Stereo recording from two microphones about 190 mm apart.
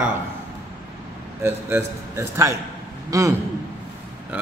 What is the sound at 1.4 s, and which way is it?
A man's voice, 15° right (ahead or behind).